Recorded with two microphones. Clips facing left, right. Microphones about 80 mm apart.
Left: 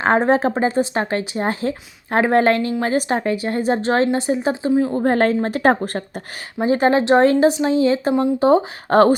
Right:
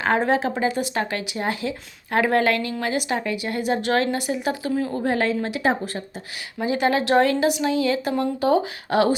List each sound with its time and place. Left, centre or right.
0.0 s speech: left
4.9 s a woman's voice: left
6.6 s speech: left
8.9 s a woman's voice: left